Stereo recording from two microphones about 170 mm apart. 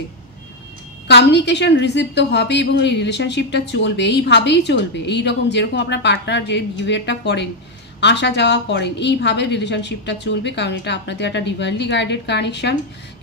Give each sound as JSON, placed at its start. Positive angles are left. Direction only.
{"t": 1.0, "sound": "a woman's voice", "side_deg": 90}